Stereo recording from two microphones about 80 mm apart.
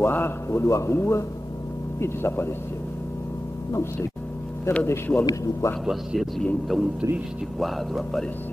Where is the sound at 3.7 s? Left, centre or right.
Left.